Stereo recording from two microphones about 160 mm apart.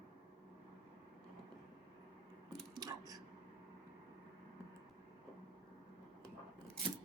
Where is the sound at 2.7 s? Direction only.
25° right (ahead or behind).